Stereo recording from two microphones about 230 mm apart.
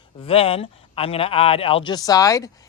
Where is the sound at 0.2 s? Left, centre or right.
Left.